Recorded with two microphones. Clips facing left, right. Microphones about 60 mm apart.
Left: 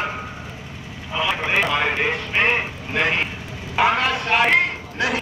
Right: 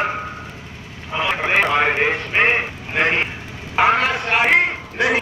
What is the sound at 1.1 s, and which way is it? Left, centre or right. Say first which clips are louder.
A man's voice: right 2 dB; right.